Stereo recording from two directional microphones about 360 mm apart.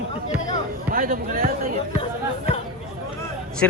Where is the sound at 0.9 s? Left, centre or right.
Right.